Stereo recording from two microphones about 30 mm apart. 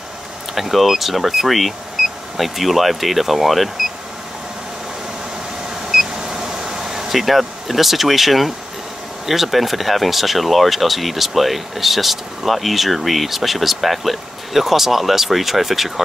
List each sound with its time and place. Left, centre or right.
0.6 s speech: centre
6.1 s vehicle: centre
7.2 s speech: centre